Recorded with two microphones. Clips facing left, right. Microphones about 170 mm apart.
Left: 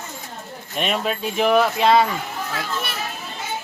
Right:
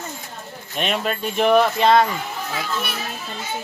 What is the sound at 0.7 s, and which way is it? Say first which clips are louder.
Speech: even; centre (ahead or behind).